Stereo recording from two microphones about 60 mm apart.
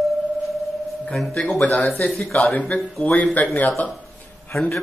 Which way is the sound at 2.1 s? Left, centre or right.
Centre.